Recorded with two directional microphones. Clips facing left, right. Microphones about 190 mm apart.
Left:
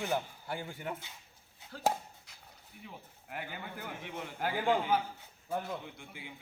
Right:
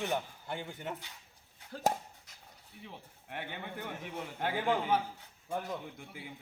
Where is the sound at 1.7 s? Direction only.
45° right (ahead or behind).